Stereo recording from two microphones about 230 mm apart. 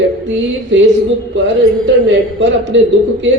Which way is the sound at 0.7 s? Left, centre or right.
Right.